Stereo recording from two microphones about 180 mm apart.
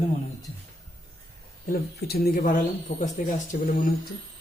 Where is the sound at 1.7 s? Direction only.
60° left (ahead or behind); by 3.6 s 45° left (ahead or behind).